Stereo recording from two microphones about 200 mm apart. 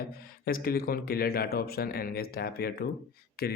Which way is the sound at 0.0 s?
50° left (ahead or behind).